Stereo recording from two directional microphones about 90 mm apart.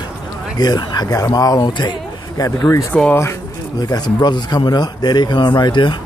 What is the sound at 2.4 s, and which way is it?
Speech, 40° left (ahead or behind).